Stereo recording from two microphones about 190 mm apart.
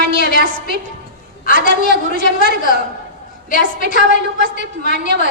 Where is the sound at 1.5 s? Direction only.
45° left (ahead or behind).